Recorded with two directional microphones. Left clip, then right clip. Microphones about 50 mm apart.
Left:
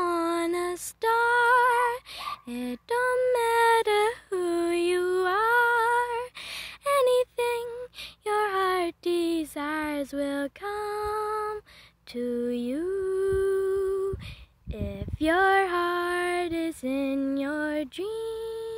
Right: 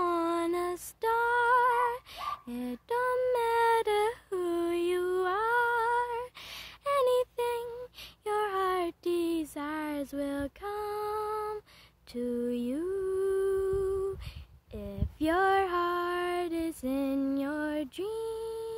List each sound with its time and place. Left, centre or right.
0.0 s female singing: left
3.3 s a sound: left
13.0 s humming: left
14.8 s female singing: left
17.3 s mantra: centre